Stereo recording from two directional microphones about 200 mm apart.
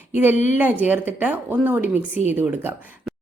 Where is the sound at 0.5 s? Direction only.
10° right (ahead or behind).